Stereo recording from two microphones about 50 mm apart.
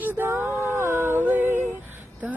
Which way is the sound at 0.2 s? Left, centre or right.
Right.